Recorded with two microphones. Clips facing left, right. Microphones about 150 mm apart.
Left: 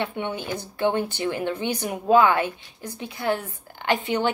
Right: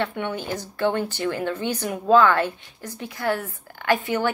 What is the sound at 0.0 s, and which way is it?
A woman's voice, 15° left (ahead or behind).